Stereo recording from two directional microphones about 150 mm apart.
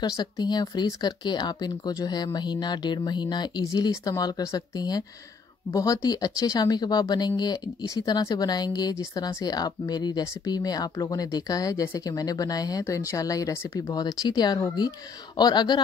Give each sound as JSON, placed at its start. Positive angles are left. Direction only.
{"t": 0.0, "sound": "speech", "side_deg": 25}